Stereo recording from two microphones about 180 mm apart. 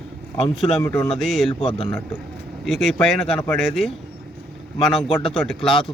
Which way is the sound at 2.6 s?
Centre (ahead or behind).